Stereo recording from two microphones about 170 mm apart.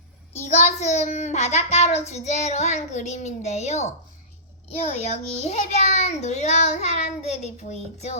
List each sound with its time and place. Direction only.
0.4 s a child's voice: 40° left (ahead or behind)